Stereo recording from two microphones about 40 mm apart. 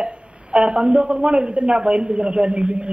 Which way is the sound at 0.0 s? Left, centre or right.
Right.